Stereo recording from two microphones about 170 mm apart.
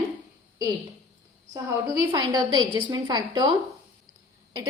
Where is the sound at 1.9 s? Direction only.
20° right (ahead or behind).